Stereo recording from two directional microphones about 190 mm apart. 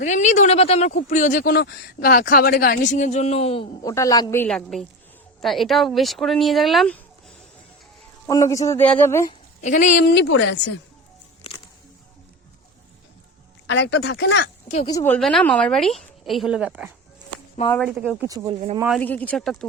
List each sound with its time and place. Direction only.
0.0 s speech: 40° left (ahead or behind)
3.8 s a woman's voice: 15° left (ahead or behind)
8.3 s a woman's voice: 15° left (ahead or behind)
9.6 s speech: 40° left (ahead or behind)
10.1 s speech: 70° left (ahead or behind)
13.7 s speech: 70° left (ahead or behind)
14.8 s a woman's voice: 15° left (ahead or behind); by 16.9 s 5° right (ahead or behind)
18.3 s speech: 30° right (ahead or behind)
18.9 s a woman's voice: 5° left (ahead or behind)